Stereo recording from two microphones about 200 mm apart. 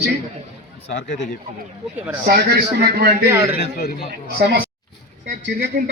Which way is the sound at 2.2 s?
50° right (ahead or behind).